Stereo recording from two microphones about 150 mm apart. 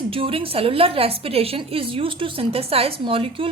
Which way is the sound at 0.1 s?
35° right (ahead or behind).